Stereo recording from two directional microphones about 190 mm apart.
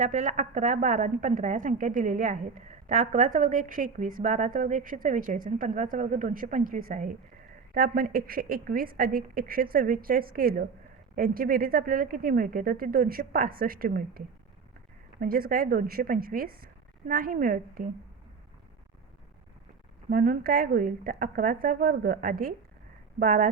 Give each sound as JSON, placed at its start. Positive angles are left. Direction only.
{"t": 0.0, "sound": "a woman's voice", "side_deg": -40}
{"t": 20.1, "sound": "a woman's voice", "side_deg": -50}